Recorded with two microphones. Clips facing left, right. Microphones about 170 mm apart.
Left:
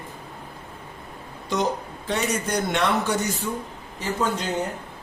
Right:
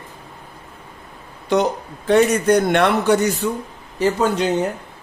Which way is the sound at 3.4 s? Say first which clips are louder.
Right 6 dB; 75° right (ahead or behind).